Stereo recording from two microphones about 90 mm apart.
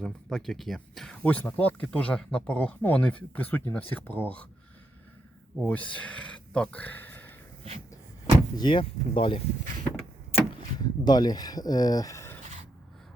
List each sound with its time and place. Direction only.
0.0 s speech: 5° left (ahead or behind)
1.2 s speech: 15° left (ahead or behind)
5.6 s speech: 15° left (ahead or behind)
8.5 s speech: 65° left (ahead or behind)
10.3 s vehicle: 90° left
10.8 s speech: 50° left (ahead or behind); by 12.4 s 30° left (ahead or behind)